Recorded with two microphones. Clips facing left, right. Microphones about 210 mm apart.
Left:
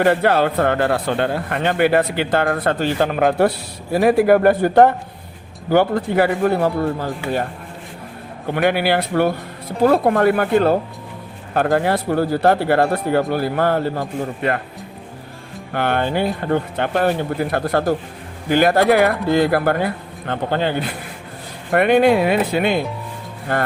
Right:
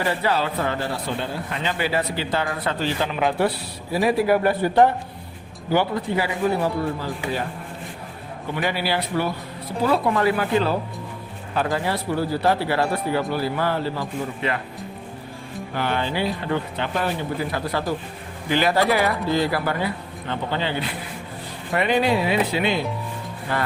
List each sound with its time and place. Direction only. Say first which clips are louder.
0.0 s speech: left 7 dB; 60° left (ahead or behind)
8.5 s speech: left 7 dB; 60° left (ahead or behind)
15.7 s speech: left 5 dB; 55° left (ahead or behind)